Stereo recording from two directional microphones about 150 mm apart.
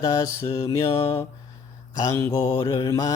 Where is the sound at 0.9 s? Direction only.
40° left (ahead or behind).